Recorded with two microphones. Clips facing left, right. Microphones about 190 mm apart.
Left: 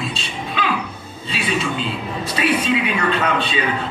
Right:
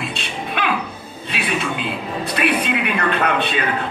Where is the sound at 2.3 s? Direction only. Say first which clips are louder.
Left 1 dB; 60° right (ahead or behind).